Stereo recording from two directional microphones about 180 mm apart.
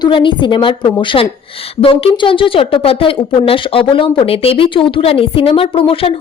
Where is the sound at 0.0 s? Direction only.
25° left (ahead or behind).